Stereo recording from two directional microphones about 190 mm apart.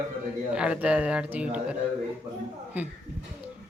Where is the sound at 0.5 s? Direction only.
5° right (ahead or behind).